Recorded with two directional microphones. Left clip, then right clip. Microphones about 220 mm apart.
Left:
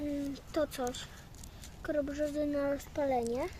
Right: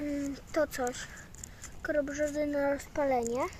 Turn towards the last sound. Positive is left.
turn(degrees=5)  # may be behind; listen again after turning